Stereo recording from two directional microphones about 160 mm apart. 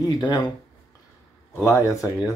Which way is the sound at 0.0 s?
25° left (ahead or behind).